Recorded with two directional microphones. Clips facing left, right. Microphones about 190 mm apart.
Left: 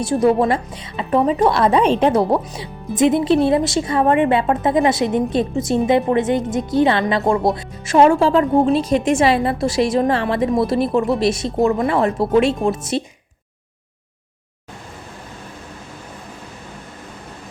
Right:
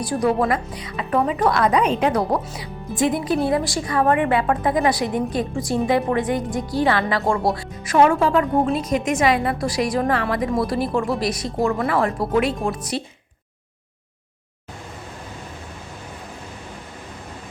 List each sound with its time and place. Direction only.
0.0 s a woman's voice: 25° left (ahead or behind)